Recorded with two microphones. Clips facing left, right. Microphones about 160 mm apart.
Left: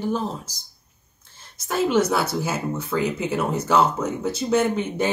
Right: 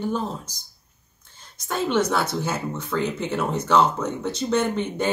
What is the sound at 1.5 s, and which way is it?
A woman's voice, 5° left (ahead or behind).